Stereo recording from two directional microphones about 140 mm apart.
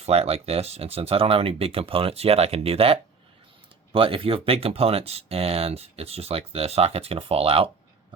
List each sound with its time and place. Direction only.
0.0 s speech: 45° right (ahead or behind)